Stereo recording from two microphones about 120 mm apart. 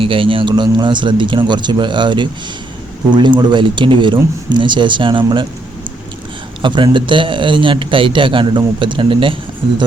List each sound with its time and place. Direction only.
0.0 s speech: 45° right (ahead or behind)
6.6 s speech: 40° right (ahead or behind)